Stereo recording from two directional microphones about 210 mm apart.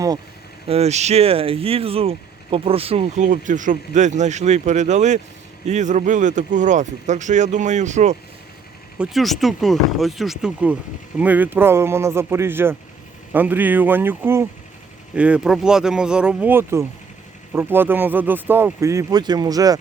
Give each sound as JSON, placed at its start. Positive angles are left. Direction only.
{"t": 0.7, "sound": "speech", "side_deg": -30}
{"t": 9.0, "sound": "speech", "side_deg": 0}